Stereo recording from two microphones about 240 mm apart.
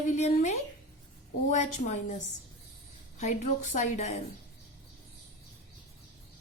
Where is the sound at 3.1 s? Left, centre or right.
Left.